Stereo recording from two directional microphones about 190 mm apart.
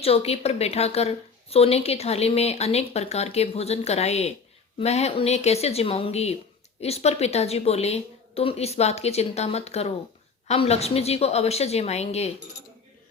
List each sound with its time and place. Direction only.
0.0 s a woman's voice: 30° left (ahead or behind)